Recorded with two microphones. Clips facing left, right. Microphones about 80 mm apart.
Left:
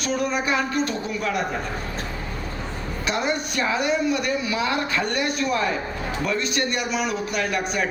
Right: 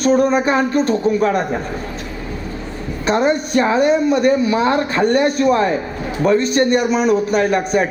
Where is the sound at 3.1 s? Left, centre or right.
Right.